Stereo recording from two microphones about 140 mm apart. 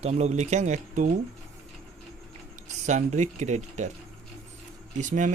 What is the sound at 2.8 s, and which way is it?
Speech, 55° right (ahead or behind).